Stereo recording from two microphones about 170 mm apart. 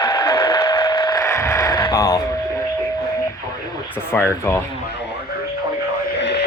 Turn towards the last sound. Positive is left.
turn(degrees=90)